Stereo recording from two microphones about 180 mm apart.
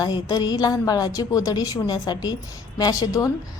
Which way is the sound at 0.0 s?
25° left (ahead or behind).